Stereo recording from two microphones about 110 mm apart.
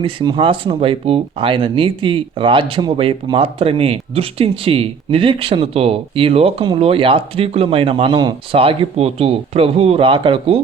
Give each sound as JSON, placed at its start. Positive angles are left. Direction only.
{"t": 0.3, "sound": "speech", "side_deg": -45}